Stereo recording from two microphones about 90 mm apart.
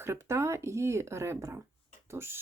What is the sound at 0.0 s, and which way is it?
Speech, 30° right (ahead or behind).